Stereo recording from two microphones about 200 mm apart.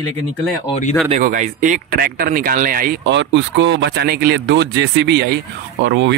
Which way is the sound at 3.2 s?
65° right (ahead or behind).